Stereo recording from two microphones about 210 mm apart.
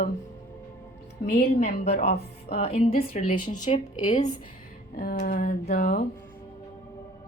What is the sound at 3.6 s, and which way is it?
Speech, 25° left (ahead or behind).